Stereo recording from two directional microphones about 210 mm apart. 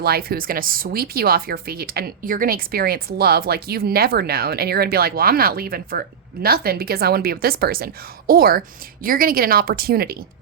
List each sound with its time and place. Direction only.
0.0 s speech: 45° right (ahead or behind)